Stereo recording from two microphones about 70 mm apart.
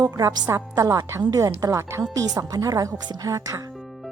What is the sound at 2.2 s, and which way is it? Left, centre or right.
A woman's voice, right.